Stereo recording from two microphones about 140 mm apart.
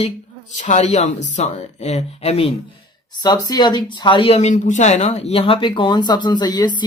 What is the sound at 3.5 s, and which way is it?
Speech, 30° left (ahead or behind).